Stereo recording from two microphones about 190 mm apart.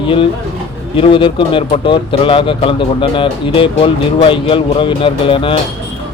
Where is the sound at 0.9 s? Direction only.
30° left (ahead or behind).